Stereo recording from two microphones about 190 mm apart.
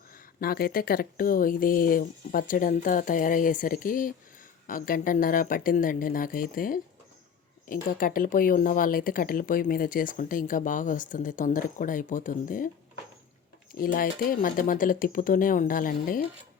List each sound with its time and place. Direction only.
0.3 s speech: 50° left (ahead or behind)
13.7 s speech: 50° left (ahead or behind)